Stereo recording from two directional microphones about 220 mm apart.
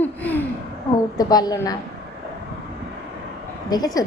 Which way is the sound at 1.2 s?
15° left (ahead or behind).